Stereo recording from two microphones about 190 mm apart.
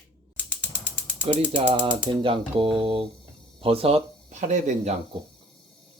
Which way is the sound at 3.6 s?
30° right (ahead or behind).